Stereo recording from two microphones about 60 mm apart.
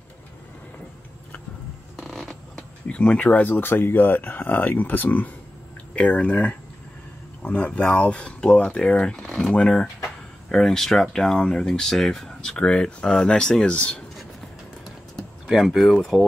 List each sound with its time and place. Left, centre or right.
2.0 s a sound: centre
2.9 s speech: centre
3.4 s speech: left; by 14.0 s centre
15.4 s speech: centre